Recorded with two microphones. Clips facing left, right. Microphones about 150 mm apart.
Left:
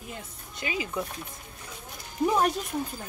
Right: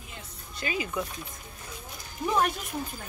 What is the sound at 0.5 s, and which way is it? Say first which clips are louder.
Speech: even; 20° left (ahead or behind).